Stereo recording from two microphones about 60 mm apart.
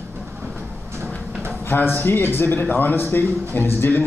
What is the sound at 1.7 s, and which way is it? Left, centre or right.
A man's voice, left.